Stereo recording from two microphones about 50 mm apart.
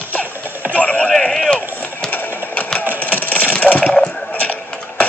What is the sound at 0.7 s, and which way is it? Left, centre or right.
Rowboat, left.